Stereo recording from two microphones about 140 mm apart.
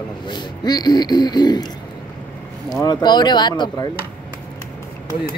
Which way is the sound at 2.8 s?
30° left (ahead or behind).